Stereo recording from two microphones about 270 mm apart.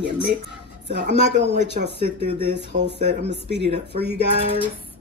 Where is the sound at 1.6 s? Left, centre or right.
Right.